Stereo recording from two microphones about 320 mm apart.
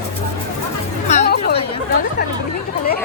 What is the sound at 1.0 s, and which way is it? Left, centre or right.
Music, left.